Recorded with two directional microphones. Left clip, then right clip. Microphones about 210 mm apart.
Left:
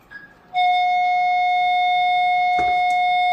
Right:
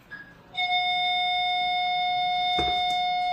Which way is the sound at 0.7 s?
25° left (ahead or behind).